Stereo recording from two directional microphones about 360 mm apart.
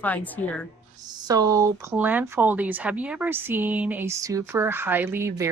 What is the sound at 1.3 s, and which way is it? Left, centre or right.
Speech, centre.